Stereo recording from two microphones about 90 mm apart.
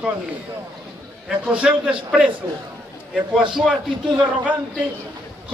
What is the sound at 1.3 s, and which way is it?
A man's voice, 10° right (ahead or behind).